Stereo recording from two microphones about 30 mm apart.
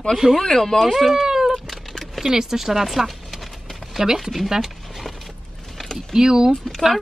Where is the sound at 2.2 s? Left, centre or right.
Centre.